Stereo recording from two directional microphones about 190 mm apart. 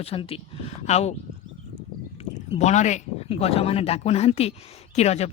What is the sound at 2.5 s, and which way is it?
Speech, 35° left (ahead or behind).